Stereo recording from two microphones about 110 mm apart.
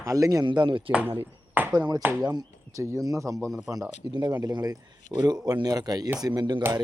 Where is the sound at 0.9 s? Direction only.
15° right (ahead or behind).